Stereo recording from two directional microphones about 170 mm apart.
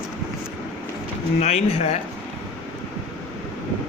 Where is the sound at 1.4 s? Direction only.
40° left (ahead or behind).